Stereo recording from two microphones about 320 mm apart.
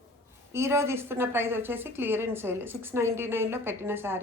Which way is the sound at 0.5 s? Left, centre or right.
Centre.